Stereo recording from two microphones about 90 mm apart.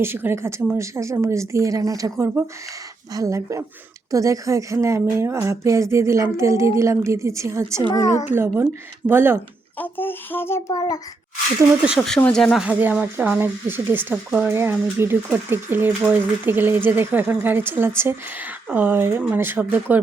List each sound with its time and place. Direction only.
0.0 s a woman's voice: 25° right (ahead or behind)
7.9 s a child's voice: 40° left (ahead or behind)
8.3 s speech: 25° right (ahead or behind)
9.7 s a sound: 20° left (ahead or behind)
10.7 s a child's voice: 45° left (ahead or behind)
11.9 s speech: 5° left (ahead or behind)
12.6 s speech: 15° right (ahead or behind)
14.5 s speech: 25° right (ahead or behind)